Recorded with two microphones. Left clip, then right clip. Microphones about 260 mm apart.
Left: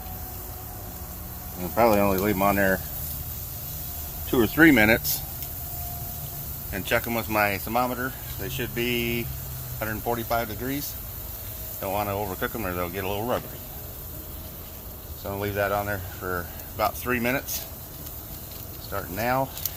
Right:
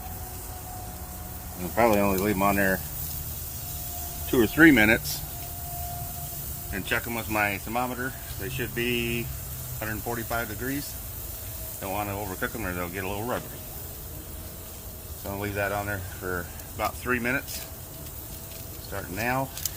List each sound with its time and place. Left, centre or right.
1.7 s speech: centre
4.3 s speech: centre
6.7 s speech: left
15.3 s speech: centre
16.7 s speech: left
18.9 s speech: centre